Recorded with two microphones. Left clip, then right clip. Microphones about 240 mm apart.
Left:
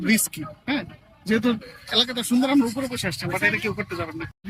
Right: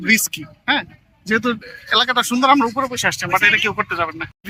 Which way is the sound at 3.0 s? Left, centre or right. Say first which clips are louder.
Right 13 dB; right.